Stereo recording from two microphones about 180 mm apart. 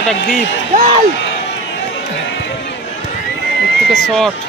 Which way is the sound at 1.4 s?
90° left.